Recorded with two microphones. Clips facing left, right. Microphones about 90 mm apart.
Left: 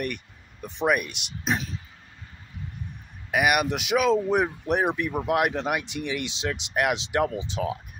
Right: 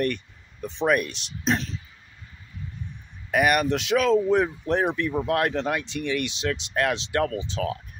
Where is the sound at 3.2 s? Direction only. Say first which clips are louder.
Right 2 dB; 10° left (ahead or behind).